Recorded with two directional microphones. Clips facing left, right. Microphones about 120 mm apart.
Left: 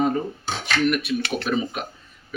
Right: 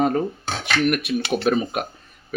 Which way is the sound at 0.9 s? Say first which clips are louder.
Right 2 dB; 55° right (ahead or behind).